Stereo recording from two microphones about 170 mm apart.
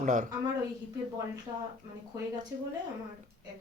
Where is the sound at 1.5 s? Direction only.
20° right (ahead or behind).